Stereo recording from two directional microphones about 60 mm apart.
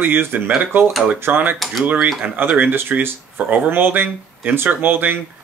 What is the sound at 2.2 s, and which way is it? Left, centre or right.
Speech, right.